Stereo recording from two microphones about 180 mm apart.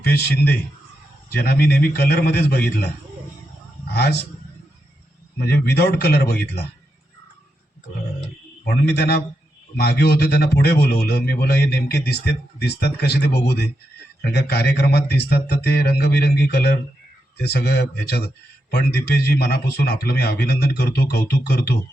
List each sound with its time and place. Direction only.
0.0 s speech: 60° left (ahead or behind)
3.9 s speech: 65° left (ahead or behind)
5.6 s speech: 60° left (ahead or behind)
8.6 s a man's voice: 60° left (ahead or behind)